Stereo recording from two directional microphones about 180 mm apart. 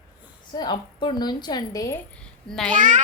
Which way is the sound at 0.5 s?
25° left (ahead or behind).